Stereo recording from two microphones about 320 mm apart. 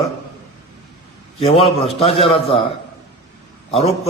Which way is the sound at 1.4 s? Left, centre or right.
Centre.